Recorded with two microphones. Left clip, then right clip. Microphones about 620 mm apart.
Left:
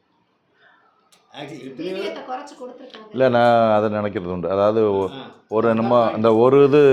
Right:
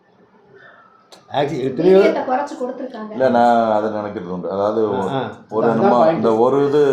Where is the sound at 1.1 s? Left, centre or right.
Right.